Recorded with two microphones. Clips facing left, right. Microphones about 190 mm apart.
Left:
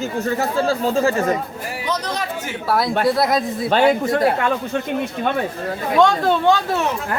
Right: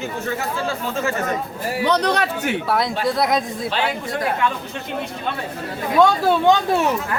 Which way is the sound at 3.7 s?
50° left (ahead or behind).